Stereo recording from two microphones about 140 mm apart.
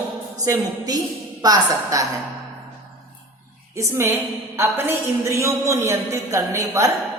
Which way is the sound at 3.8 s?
20° right (ahead or behind).